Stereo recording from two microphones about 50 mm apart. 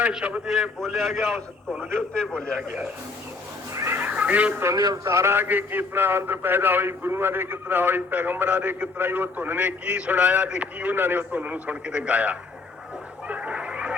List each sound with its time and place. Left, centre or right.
0.1 s a man's voice: right
0.9 s a man's voice: centre
2.0 s a man's voice: centre
2.6 s a man's voice: centre
3.9 s speech: right
4.6 s speech: right
5.4 s a man's voice: right
9.0 s a man's voice: right
10.9 s a man's voice: right
13.2 s cat: right